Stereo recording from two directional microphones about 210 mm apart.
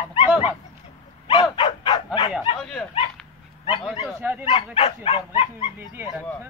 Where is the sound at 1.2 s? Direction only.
25° left (ahead or behind).